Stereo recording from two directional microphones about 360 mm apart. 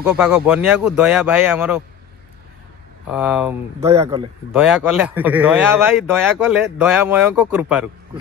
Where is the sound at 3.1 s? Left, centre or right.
Centre.